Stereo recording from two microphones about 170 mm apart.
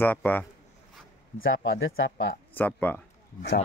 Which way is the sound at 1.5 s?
90° left.